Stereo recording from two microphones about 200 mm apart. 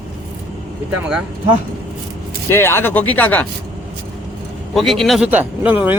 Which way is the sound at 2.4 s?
10° left (ahead or behind).